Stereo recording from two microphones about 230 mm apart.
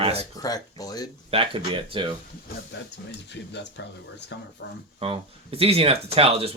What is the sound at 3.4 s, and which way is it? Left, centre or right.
Speech, left.